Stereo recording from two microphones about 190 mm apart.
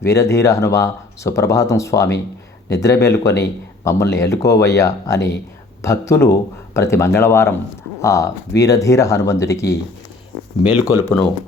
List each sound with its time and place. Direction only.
0.0 s speech: 15° left (ahead or behind)